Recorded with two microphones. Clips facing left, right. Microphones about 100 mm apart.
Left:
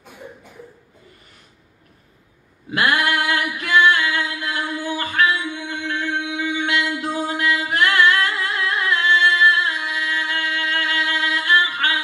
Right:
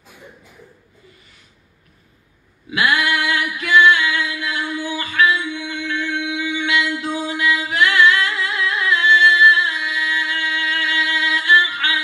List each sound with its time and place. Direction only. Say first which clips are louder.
2.7 s female singing: even; 45° left (ahead or behind)